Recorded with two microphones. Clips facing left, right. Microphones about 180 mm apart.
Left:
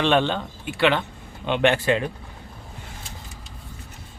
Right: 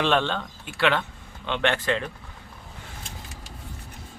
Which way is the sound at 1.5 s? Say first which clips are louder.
Left 5 dB; 15° left (ahead or behind).